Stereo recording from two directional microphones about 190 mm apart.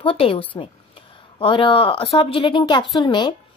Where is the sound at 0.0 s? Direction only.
30° left (ahead or behind).